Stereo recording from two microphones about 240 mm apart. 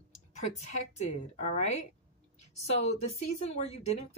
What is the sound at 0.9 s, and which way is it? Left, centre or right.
Speech, left.